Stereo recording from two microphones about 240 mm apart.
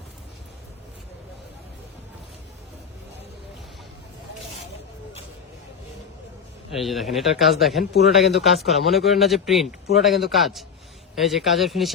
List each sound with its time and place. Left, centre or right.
6.7 s speech: centre